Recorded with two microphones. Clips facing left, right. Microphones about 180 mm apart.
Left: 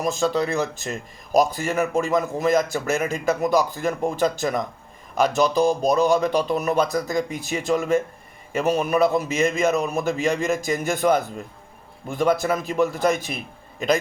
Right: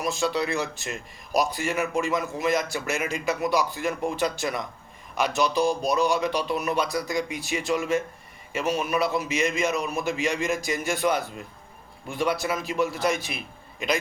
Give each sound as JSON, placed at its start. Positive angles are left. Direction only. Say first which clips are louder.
{"t": 0.0, "sound": "a man's voice", "louder": "left 4 dB", "side_deg": 45}